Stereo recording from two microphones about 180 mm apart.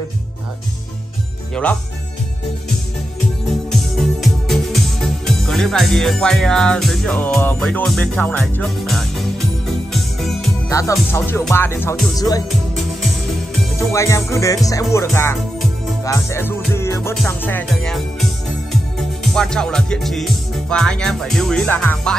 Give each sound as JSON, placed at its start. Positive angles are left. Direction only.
{"t": 1.5, "sound": "music", "side_deg": 10}
{"t": 4.0, "sound": "music", "side_deg": 0}
{"t": 10.7, "sound": "music", "side_deg": 15}
{"t": 12.2, "sound": "speech", "side_deg": 20}
{"t": 13.7, "sound": "music", "side_deg": 15}
{"t": 17.3, "sound": "speech", "side_deg": 10}
{"t": 19.2, "sound": "music", "side_deg": 0}